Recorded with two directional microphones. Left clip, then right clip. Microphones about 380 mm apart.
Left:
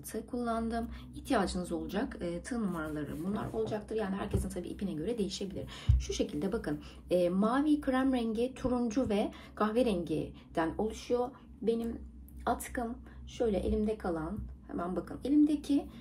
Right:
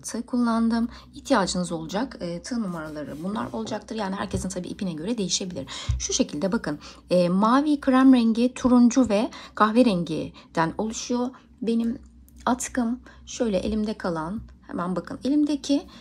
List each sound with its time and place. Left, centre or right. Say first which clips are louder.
0.0 s a woman's voice: right 10 dB; centre
12.4 s speech: right 8 dB; right